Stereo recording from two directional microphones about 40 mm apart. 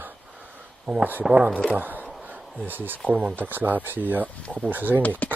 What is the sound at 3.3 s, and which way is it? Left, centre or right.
Speech, right.